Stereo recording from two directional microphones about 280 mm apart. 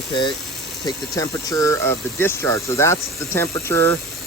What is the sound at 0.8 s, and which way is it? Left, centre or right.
Speech, centre.